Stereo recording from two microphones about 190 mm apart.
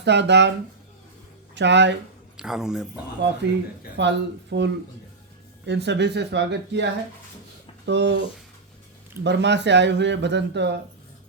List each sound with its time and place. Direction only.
0.0 s speech: 65° right (ahead or behind)
1.5 s speech: 65° right (ahead or behind)
2.3 s speech: 5° right (ahead or behind)
3.9 s speech: 65° right (ahead or behind)
9.2 s speech: 65° right (ahead or behind)